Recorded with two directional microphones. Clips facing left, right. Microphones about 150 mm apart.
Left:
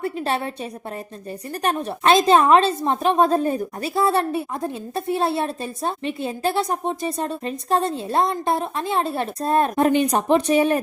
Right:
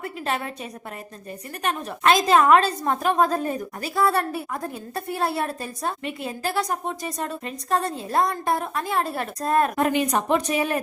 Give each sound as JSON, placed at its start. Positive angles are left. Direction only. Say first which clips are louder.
{"t": 0.0, "sound": "a woman's voice", "louder": "left 4 dB", "side_deg": 30}